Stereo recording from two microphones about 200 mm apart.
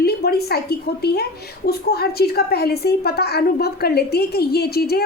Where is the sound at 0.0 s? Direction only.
50° left (ahead or behind).